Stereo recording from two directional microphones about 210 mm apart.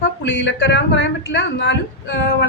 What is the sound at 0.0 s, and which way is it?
A woman's voice, 60° left (ahead or behind).